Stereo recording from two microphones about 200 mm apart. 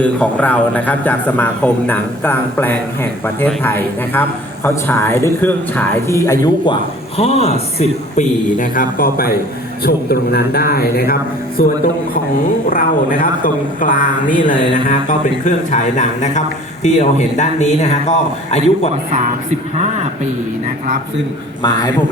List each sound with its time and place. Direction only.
0.0 s a man's voice: 5° left (ahead or behind)
7.2 s a man's voice: 30° left (ahead or behind); by 11.6 s 50° left (ahead or behind)
12.7 s a man's voice: 45° left (ahead or behind)